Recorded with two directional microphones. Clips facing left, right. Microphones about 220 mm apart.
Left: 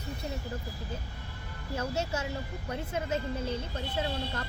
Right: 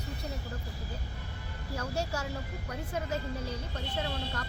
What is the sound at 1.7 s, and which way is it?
A woman's voice, 20° left (ahead or behind).